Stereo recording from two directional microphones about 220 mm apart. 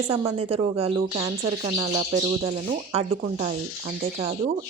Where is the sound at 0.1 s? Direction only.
25° right (ahead or behind).